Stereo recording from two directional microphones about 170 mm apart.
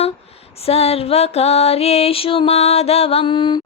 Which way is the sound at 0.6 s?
35° left (ahead or behind).